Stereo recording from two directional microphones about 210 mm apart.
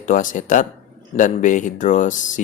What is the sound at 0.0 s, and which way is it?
Speech, 40° left (ahead or behind).